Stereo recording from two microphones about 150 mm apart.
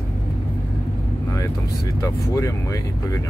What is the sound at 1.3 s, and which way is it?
Speech, 20° left (ahead or behind).